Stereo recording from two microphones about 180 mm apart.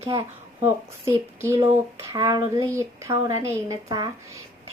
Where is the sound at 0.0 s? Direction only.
15° right (ahead or behind).